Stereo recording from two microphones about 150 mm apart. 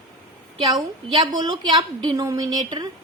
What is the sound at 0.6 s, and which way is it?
A woman's voice, 30° right (ahead or behind).